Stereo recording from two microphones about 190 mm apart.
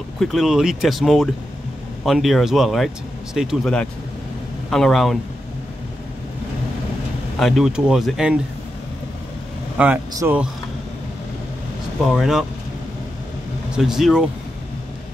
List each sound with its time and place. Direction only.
0.2 s speech: centre (ahead or behind)
7.3 s speech: centre (ahead or behind)
9.8 s speech: 10° right (ahead or behind)
12.1 s speech: centre (ahead or behind)
13.7 s speech: centre (ahead or behind)